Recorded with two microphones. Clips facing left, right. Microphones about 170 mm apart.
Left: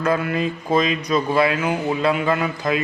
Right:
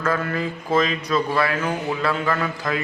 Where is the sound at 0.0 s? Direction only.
15° left (ahead or behind).